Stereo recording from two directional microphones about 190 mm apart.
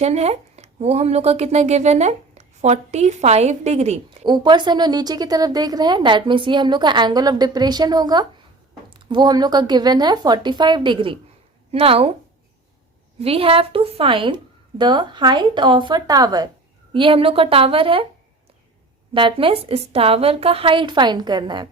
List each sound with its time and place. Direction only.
0.0 s a woman's voice: 35° right (ahead or behind)
13.1 s speech: 30° right (ahead or behind)
19.1 s speech: 25° right (ahead or behind)